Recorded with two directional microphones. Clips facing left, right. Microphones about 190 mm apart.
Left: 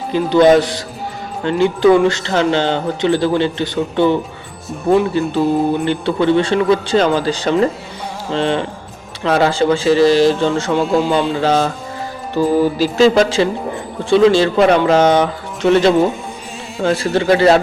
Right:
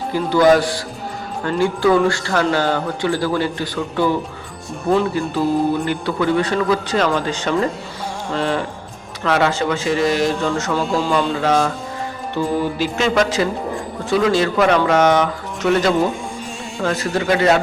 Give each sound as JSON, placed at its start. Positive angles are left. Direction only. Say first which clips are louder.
{"t": 0.1, "sound": "a man's voice", "louder": "left 3 dB", "side_deg": 20}